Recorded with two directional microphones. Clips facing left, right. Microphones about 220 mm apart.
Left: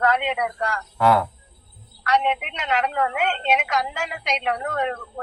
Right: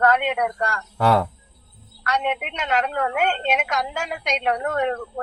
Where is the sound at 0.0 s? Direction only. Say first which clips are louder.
Right 2 dB; 45° right (ahead or behind).